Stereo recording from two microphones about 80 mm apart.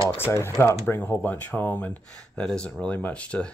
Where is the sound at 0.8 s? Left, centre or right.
Left.